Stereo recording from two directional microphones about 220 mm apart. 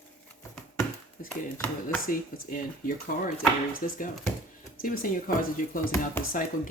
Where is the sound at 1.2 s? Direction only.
40° left (ahead or behind).